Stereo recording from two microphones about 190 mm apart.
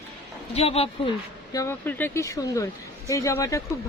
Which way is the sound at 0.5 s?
30° left (ahead or behind).